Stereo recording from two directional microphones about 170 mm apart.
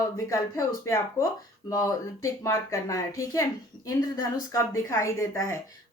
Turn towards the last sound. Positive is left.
turn(degrees=15)  # may be behind; listen again after turning